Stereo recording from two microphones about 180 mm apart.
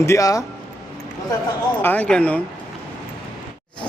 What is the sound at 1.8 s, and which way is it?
Speech, 10° left (ahead or behind).